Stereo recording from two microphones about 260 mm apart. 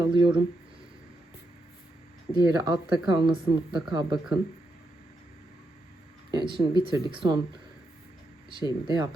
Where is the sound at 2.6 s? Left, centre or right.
Centre.